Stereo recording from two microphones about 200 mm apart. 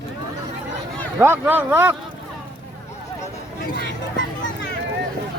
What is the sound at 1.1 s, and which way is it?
Speech, 10° right (ahead or behind).